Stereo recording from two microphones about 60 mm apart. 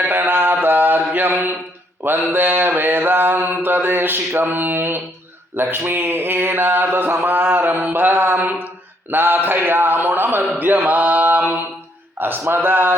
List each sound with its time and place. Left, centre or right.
0.0 s mantra: right
10.6 s a sound: right
12.2 s mantra: right